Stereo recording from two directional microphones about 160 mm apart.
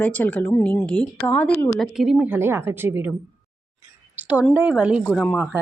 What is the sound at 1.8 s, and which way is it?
A woman's voice, centre (ahead or behind).